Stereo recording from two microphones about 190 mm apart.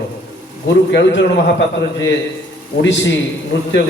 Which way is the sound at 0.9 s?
70° left (ahead or behind).